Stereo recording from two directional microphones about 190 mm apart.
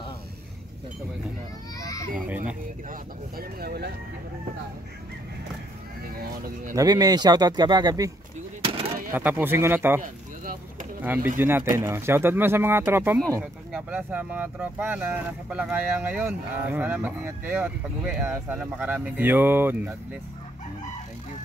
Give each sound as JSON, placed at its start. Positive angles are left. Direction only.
{"t": 1.8, "sound": "children playing", "side_deg": 15}
{"t": 2.1, "sound": "speech", "side_deg": -10}
{"t": 2.9, "sound": "speech", "side_deg": -55}
{"t": 6.1, "sound": "speech", "side_deg": -50}
{"t": 6.7, "sound": "speech", "side_deg": -20}
{"t": 8.6, "sound": "a sound", "side_deg": -30}
{"t": 9.1, "sound": "speech", "side_deg": -10}
{"t": 10.0, "sound": "a sound", "side_deg": -45}
{"t": 11.2, "sound": "speech", "side_deg": -10}